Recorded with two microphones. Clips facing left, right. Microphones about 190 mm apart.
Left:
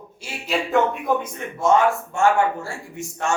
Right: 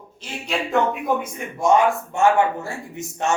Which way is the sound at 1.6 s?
15° right (ahead or behind).